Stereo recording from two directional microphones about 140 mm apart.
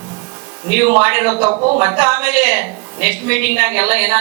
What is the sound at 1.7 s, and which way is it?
A woman's voice, 15° right (ahead or behind).